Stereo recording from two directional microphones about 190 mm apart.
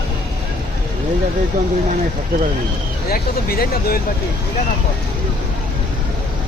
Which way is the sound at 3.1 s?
55° left (ahead or behind).